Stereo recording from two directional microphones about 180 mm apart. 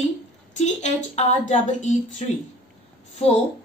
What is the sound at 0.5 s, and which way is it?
A woman's voice, 40° left (ahead or behind).